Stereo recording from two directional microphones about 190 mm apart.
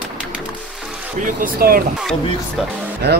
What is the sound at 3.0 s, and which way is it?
Speech, 60° right (ahead or behind).